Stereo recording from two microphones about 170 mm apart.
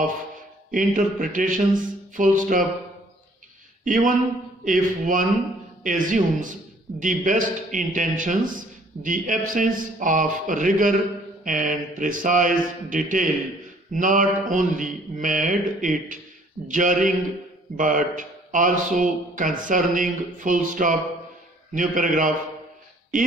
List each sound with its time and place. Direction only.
0.7 s a man's voice: 50° right (ahead or behind)
3.8 s a man's voice: 50° right (ahead or behind)